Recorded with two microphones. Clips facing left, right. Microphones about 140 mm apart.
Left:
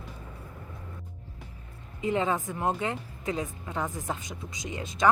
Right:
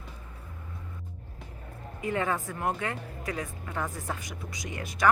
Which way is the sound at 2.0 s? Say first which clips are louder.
Left 2 dB; 20° left (ahead or behind).